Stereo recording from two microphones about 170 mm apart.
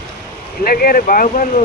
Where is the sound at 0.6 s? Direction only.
60° left (ahead or behind).